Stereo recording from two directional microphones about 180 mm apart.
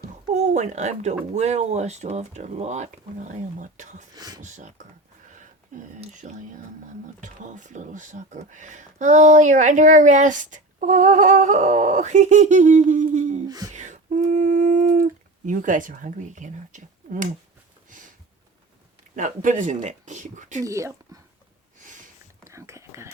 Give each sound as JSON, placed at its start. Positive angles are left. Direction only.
{"t": 0.3, "sound": "speech", "side_deg": -40}
{"t": 4.1, "sound": "speech", "side_deg": -20}
{"t": 4.4, "sound": "speech", "side_deg": -40}
{"t": 17.8, "sound": "a sound", "side_deg": -45}
{"t": 19.1, "sound": "speech", "side_deg": -45}
{"t": 20.7, "sound": "speech", "side_deg": -15}
{"t": 22.4, "sound": "whispering", "side_deg": -15}